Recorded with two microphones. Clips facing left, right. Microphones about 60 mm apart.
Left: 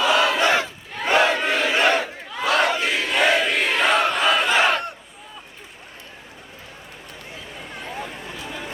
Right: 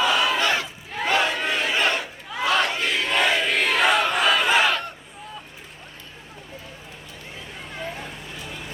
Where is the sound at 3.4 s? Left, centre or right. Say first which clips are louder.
Left 1 dB; centre.